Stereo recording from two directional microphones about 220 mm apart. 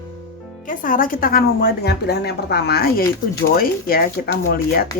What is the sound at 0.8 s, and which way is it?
A woman's voice, 40° left (ahead or behind).